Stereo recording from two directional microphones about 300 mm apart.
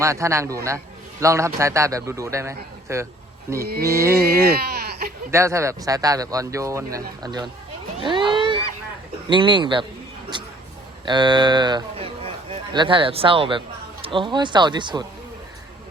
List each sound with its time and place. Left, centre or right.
0.0 s a man's voice: centre
3.6 s speech: right
3.8 s a man's voice: centre
4.3 s speech: right
5.3 s a man's voice: centre
8.0 s a sound: centre
9.3 s a man's voice: centre
10.3 s a sound: centre
11.0 s a man's voice: centre